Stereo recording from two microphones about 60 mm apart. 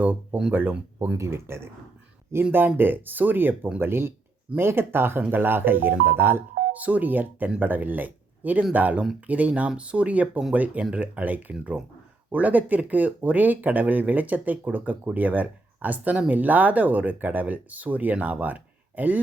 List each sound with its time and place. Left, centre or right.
0.0 s speech: right
1.1 s speech: right
2.6 s speech: right
6.7 s speech: right